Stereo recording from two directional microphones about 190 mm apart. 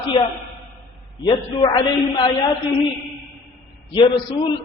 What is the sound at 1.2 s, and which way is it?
Speech, 20° left (ahead or behind).